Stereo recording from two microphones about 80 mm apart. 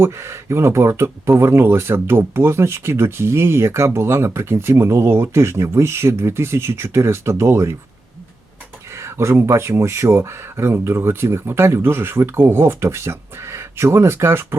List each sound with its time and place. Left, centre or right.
0.0 s speech: right
8.9 s speech: right